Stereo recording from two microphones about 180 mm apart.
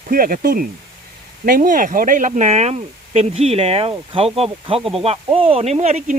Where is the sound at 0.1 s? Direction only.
50° right (ahead or behind).